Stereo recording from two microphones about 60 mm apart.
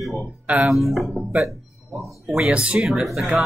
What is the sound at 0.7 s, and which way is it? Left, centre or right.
Speech, centre.